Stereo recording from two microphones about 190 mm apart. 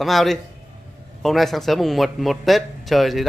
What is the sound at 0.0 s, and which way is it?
Speech, centre (ahead or behind).